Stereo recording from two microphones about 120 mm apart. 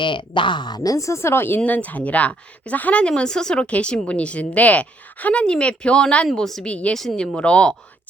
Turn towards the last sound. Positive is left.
turn(degrees=10)  # may be behind; listen again after turning